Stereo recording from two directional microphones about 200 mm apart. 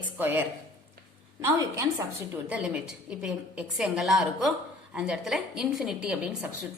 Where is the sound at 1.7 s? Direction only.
10° right (ahead or behind).